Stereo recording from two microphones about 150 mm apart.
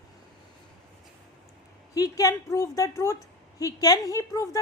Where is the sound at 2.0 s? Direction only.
25° left (ahead or behind).